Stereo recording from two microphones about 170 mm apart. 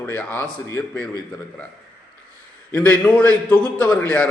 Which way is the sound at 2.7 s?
10° left (ahead or behind).